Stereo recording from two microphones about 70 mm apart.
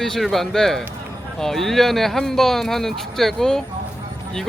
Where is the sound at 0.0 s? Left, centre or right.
Centre.